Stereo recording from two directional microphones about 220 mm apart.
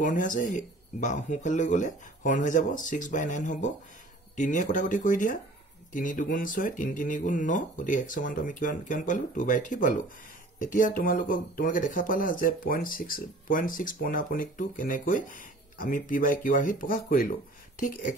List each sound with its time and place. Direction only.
0.0 s speech: 35° left (ahead or behind)